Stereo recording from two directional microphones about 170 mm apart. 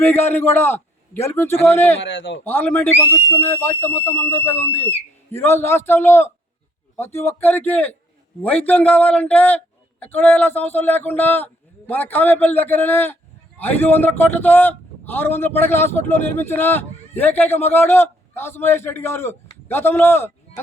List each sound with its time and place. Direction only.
0.0 s a man's voice: 15° left (ahead or behind)
2.0 s a man's voice: 90° left
2.4 s a man's voice: 10° left (ahead or behind)
3.0 s speech: 15° right (ahead or behind)
3.2 s a man's voice: 10° left (ahead or behind)